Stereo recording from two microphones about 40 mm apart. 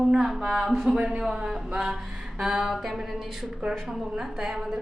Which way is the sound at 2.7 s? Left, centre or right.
Centre.